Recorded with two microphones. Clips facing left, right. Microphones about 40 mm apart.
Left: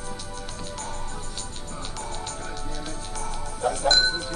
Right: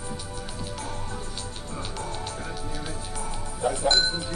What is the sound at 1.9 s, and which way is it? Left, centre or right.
Music, centre.